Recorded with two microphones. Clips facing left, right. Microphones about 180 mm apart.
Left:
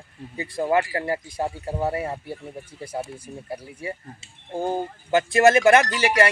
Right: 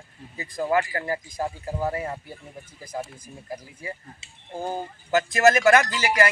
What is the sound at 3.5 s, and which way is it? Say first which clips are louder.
Speech: left 3 dB; 30° left (ahead or behind).